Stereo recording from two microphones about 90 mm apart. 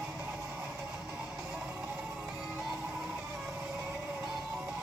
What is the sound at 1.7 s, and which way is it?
Music, 30° right (ahead or behind).